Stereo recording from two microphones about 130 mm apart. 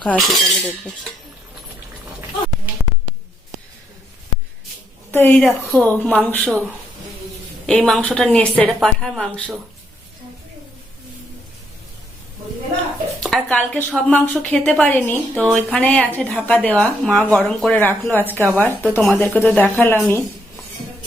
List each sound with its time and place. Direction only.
0.0 s speech: 5° left (ahead or behind)
5.1 s speech: 15° left (ahead or behind)
7.7 s speech: 5° left (ahead or behind)
13.3 s speech: 10° left (ahead or behind)
18.3 s a woman's voice: 20° right (ahead or behind)
18.9 s speech: 15° left (ahead or behind)